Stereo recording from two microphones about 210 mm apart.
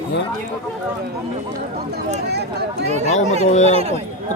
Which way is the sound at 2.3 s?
50° right (ahead or behind).